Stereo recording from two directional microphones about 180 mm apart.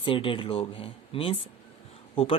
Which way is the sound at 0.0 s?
30° left (ahead or behind).